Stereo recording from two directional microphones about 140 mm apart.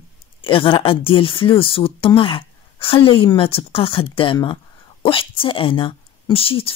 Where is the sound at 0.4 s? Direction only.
40° left (ahead or behind).